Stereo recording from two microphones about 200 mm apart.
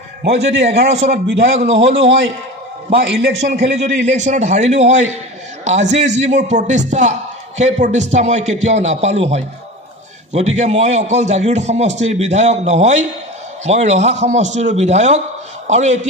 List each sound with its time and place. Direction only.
0.3 s a man's voice: 35° right (ahead or behind)
1.1 s a man's voice: 60° right (ahead or behind)
1.6 s a man's voice: 35° right (ahead or behind)
3.5 s a man's voice: 35° right (ahead or behind)